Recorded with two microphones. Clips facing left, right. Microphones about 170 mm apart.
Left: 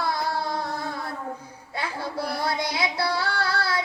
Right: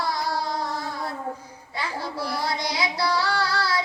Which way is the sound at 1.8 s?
55° left (ahead or behind).